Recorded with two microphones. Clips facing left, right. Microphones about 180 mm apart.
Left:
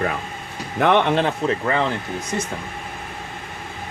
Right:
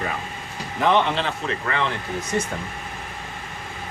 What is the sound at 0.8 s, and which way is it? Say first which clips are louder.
Speech: left 3 dB; 55° left (ahead or behind).